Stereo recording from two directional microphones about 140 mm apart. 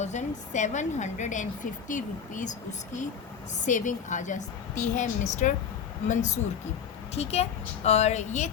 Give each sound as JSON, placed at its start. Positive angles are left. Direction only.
{"t": 0.0, "sound": "a woman's voice", "side_deg": 60}